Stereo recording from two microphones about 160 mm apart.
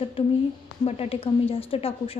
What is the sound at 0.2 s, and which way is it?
A woman's voice, 35° left (ahead or behind).